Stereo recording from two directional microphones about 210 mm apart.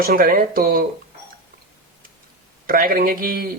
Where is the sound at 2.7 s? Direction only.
40° right (ahead or behind).